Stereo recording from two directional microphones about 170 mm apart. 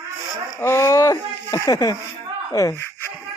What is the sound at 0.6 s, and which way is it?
Speech, 15° left (ahead or behind).